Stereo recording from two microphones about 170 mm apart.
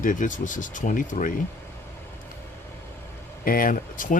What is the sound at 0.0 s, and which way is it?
Speech, 50° left (ahead or behind).